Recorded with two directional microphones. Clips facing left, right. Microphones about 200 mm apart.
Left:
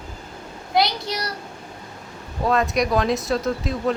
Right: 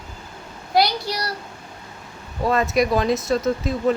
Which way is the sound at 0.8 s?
20° left (ahead or behind).